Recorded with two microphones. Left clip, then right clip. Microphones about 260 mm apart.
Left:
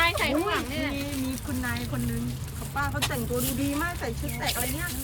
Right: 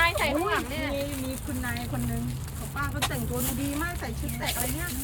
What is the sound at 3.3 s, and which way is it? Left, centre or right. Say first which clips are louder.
Speech: left 3 dB; centre.